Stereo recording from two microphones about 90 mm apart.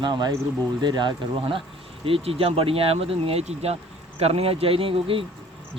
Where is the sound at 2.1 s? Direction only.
90° right.